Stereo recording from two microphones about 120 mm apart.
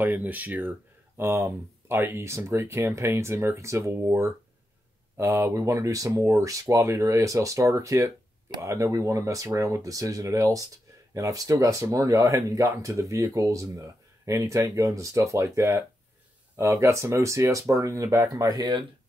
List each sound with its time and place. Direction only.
0.0 s speech: 15° right (ahead or behind); by 18.9 s 35° right (ahead or behind)